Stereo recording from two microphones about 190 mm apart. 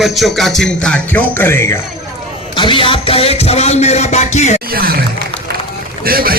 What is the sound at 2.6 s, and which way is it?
Music, 25° left (ahead or behind).